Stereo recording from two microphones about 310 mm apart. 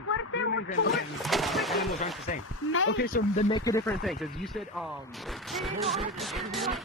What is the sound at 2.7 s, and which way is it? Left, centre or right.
Speech, left.